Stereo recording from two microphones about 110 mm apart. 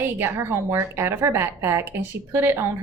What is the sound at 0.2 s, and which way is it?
A woman's voice, 25° right (ahead or behind).